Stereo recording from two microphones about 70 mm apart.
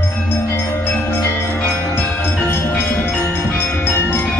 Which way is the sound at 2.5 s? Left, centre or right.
Left.